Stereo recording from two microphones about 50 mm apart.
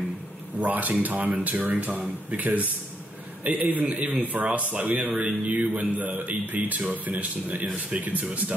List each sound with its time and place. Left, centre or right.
0.6 s speech: right